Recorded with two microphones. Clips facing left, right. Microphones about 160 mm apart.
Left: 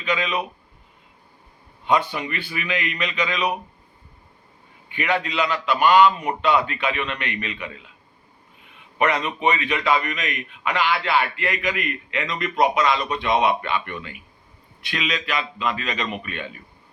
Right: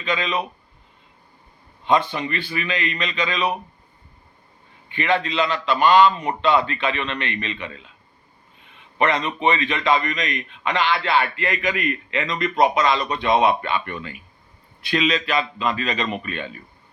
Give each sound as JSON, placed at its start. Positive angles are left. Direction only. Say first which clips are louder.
{"t": 0.0, "sound": "a man's voice", "louder": "even", "side_deg": 10}
{"t": 1.9, "sound": "a man's voice", "louder": "right 2 dB", "side_deg": 10}
{"t": 4.9, "sound": "a man's voice", "louder": "right 2 dB", "side_deg": 10}
{"t": 9.0, "sound": "a man's voice", "louder": "right 1 dB", "side_deg": 10}
{"t": 10.8, "sound": "a man's voice", "louder": "right 1 dB", "side_deg": -30}